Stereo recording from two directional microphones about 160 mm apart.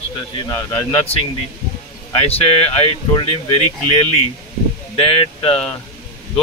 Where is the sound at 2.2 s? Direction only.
40° left (ahead or behind).